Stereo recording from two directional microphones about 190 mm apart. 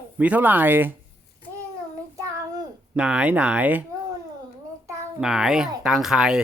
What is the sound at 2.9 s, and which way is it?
Speech, 5° right (ahead or behind).